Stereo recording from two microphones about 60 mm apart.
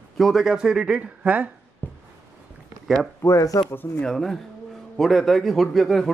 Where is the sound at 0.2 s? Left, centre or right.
Centre; by 1.5 s right.